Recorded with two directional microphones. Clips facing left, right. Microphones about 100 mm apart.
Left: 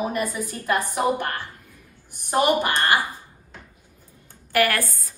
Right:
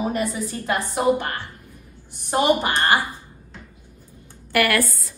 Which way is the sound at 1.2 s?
15° right (ahead or behind).